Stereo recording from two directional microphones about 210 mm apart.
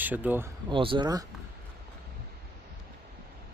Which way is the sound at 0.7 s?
25° right (ahead or behind).